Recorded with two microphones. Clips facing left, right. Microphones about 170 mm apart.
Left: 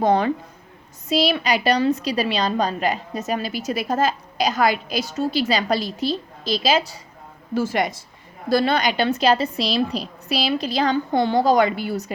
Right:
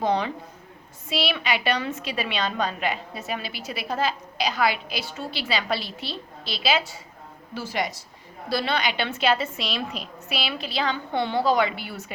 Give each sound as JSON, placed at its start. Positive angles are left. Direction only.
{"t": 0.0, "sound": "a woman's voice", "side_deg": 50}